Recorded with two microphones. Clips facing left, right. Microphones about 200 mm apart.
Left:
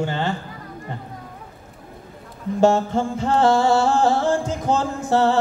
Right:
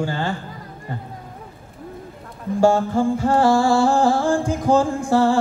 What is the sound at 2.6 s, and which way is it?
Music, 20° left (ahead or behind).